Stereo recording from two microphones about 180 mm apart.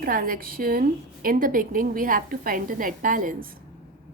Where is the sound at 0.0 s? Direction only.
55° right (ahead or behind).